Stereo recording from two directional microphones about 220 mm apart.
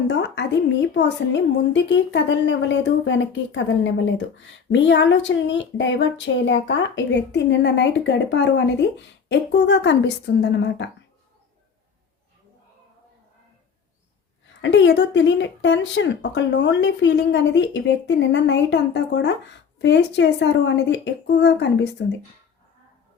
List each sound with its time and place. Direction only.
0.1 s a woman's voice: 50° left (ahead or behind)
14.6 s speech: 55° left (ahead or behind)